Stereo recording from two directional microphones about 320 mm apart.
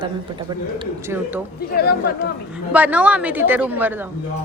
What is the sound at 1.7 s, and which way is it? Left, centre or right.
Speech, left.